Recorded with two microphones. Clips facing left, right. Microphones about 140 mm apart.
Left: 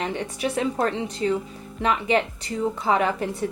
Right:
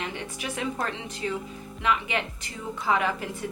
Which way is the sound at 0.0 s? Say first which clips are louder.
Left 7 dB; 35° left (ahead or behind).